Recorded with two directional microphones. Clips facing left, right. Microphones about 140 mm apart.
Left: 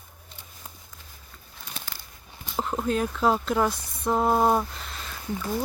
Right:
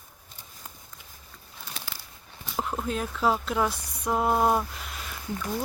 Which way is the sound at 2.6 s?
Centre (ahead or behind).